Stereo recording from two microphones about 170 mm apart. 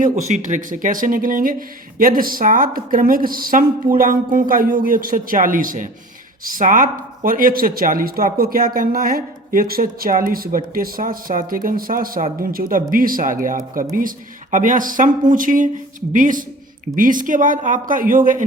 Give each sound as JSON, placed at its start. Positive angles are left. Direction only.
{"t": 0.0, "sound": "speech", "side_deg": -45}